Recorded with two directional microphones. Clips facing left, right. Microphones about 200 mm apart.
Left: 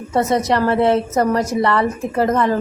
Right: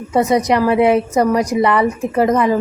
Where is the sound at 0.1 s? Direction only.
15° right (ahead or behind).